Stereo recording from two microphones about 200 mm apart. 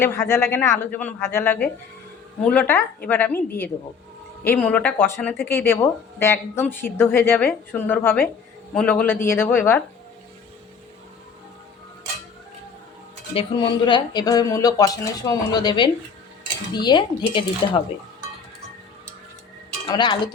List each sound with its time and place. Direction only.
0.0 s speech: 10° left (ahead or behind)
4.4 s speech: 5° left (ahead or behind)
13.3 s speech: 25° left (ahead or behind)
19.9 s speech: 20° left (ahead or behind)